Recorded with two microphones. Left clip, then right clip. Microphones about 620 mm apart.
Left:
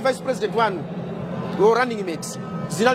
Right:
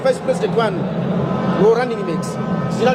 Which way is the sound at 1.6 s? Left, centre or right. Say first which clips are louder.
Right 2 dB; left.